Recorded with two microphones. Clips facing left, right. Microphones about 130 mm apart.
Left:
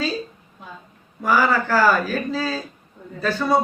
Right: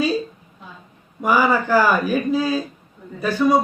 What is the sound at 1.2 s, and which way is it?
A man's voice, 15° right (ahead or behind).